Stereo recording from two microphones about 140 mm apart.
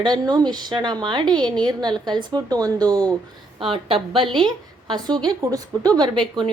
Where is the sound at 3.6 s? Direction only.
40° right (ahead or behind).